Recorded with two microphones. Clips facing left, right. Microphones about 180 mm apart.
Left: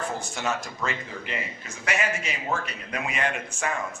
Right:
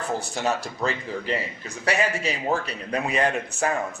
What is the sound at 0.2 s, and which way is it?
A man's voice, 35° right (ahead or behind).